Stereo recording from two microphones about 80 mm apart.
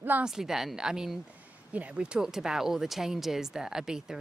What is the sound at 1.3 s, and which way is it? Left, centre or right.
Speech, centre.